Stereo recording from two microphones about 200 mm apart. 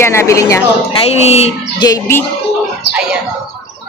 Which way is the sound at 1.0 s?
30° left (ahead or behind).